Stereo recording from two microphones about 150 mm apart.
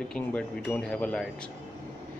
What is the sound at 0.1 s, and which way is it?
Speech, 10° left (ahead or behind).